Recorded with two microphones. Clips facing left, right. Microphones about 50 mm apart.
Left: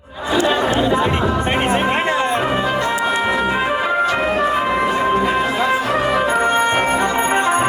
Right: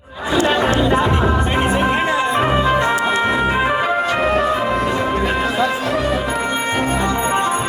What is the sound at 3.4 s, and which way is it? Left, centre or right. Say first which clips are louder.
Organ: right 1 dB; centre.